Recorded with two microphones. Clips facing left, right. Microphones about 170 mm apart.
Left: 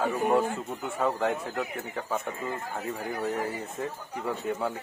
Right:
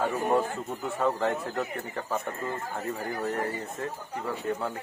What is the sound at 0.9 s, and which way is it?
Speech, centre (ahead or behind).